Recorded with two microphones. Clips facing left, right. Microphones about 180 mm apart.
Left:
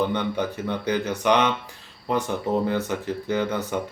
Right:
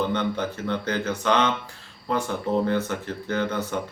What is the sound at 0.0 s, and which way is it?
A man's voice, 15° left (ahead or behind).